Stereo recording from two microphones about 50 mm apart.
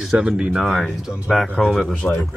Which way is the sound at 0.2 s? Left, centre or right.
Right.